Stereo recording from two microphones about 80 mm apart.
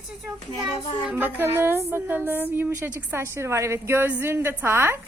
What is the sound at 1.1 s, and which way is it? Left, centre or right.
A woman's voice, right.